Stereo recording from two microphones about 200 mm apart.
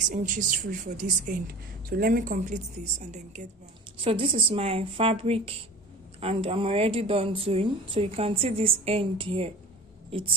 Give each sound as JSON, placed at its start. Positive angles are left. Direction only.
{"t": 0.1, "sound": "a woman's voice", "side_deg": -40}